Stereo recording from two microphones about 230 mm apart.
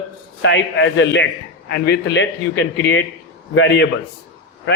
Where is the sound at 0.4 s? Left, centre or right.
Left.